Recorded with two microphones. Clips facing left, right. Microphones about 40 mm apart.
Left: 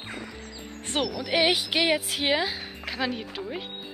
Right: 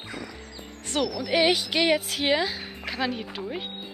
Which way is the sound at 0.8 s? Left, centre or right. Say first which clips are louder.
Right 1 dB; left.